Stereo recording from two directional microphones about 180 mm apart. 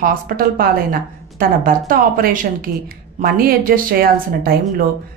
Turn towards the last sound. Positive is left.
turn(degrees=-55)  # may be behind; listen again after turning